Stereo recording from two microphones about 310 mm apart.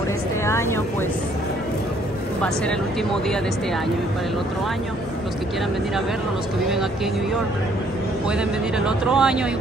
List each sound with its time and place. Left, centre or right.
0.5 s speech: centre
8.3 s speech: centre